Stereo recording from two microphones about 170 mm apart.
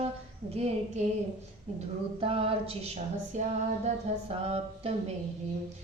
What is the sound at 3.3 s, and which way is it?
Female singing, 45° right (ahead or behind).